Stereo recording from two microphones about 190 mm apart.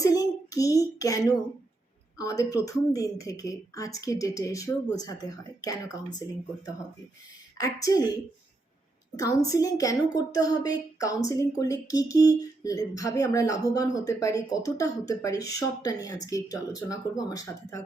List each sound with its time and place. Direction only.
0.0 s a child's voice: 20° left (ahead or behind)
7.6 s speech: 20° left (ahead or behind)
9.5 s speech: 20° left (ahead or behind)